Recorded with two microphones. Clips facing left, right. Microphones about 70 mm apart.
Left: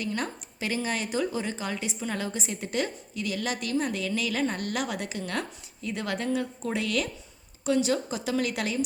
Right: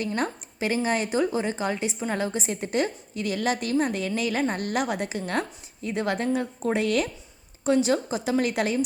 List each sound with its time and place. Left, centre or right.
0.0 s a woman's voice: right